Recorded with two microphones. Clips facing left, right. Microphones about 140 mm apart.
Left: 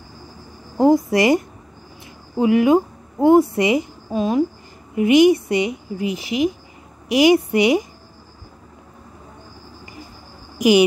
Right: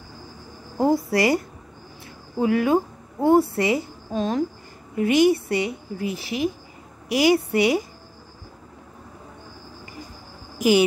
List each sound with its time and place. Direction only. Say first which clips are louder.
0.7 s a woman's voice: left 5 dB; 20° left (ahead or behind)